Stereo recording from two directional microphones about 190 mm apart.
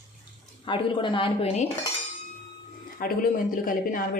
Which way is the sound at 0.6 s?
25° left (ahead or behind).